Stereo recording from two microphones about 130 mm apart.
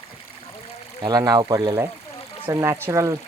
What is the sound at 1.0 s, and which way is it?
Speech, 30° right (ahead or behind).